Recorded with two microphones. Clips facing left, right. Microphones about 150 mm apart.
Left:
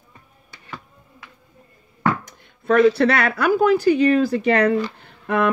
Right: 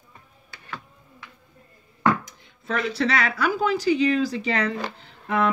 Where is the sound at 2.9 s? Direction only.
55° left (ahead or behind).